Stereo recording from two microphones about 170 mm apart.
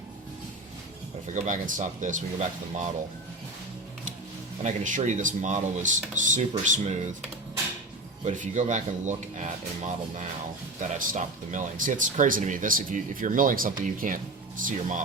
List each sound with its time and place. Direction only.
1.3 s speech: 45° right (ahead or behind)
4.6 s speech: 50° right (ahead or behind)
8.2 s speech: 45° right (ahead or behind)